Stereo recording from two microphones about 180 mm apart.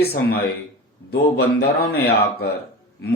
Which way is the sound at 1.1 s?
60° left (ahead or behind).